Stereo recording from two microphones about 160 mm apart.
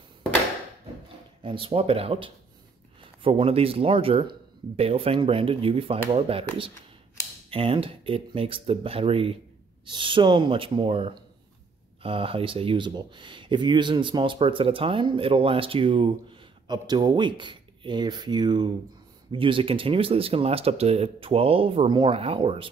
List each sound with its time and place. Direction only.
1.4 s speech: 35° right (ahead or behind)